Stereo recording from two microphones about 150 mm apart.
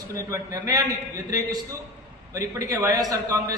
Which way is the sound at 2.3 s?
20° right (ahead or behind).